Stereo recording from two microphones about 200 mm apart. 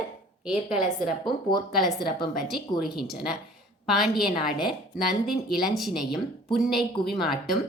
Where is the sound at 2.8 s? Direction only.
Centre (ahead or behind).